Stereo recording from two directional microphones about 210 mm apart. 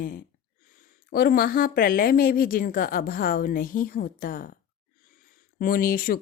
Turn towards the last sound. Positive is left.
turn(degrees=45)  # may be behind; listen again after turning